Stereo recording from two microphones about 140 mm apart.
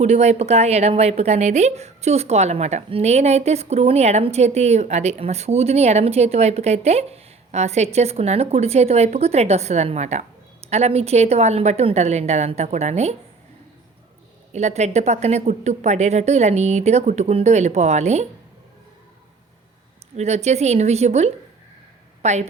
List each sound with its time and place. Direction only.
0.0 s a woman's voice: 50° right (ahead or behind)
14.5 s a woman's voice: 55° right (ahead or behind)
20.1 s a woman's voice: 50° right (ahead or behind)